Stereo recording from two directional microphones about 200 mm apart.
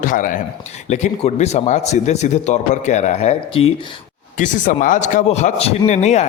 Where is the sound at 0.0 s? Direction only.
40° left (ahead or behind).